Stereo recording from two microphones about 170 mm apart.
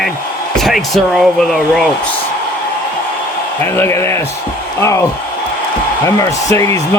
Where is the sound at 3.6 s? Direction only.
15° left (ahead or behind).